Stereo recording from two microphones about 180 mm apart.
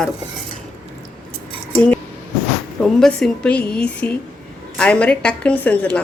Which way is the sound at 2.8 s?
Centre (ahead or behind).